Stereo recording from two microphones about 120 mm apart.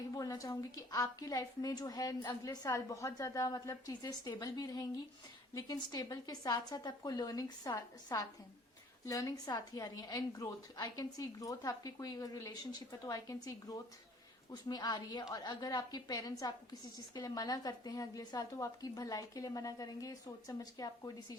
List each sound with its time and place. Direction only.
0.1 s a woman's voice: 30° left (ahead or behind)